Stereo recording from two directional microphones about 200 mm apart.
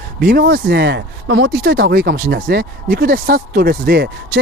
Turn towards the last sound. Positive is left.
turn(degrees=-55)  # may be behind; listen again after turning